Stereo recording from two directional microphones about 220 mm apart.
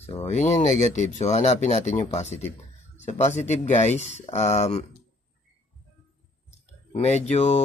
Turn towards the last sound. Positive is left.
turn(degrees=30)  # may be behind; listen again after turning